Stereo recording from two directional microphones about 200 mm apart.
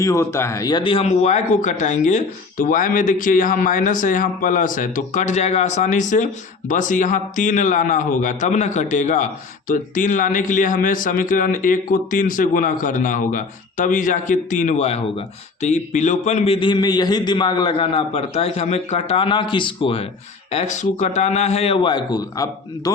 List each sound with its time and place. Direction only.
0.0 s a man's voice: 15° left (ahead or behind)